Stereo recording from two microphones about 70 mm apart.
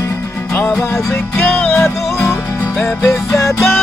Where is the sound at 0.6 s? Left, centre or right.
Left.